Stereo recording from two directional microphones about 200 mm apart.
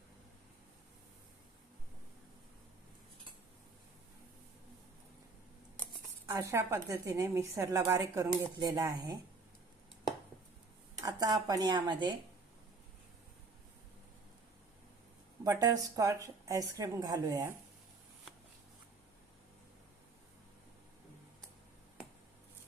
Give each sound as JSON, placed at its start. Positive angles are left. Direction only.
{"t": 6.3, "sound": "a woman's voice", "side_deg": -15}
{"t": 11.0, "sound": "speech", "side_deg": -20}
{"t": 15.4, "sound": "a woman's voice", "side_deg": -20}